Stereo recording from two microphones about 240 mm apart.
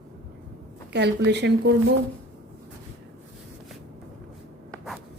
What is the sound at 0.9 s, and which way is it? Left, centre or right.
Speech, right.